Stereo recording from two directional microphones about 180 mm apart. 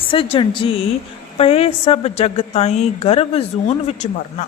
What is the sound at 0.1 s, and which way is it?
A woman's voice, 30° left (ahead or behind).